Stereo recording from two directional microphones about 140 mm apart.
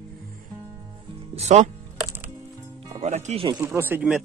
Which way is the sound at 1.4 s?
55° right (ahead or behind).